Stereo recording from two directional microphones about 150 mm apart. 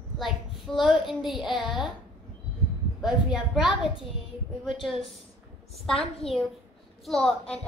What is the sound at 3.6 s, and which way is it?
Speech, 30° left (ahead or behind).